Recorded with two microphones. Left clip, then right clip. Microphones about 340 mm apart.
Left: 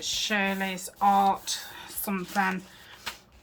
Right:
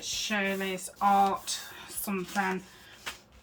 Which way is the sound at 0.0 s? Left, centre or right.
Centre.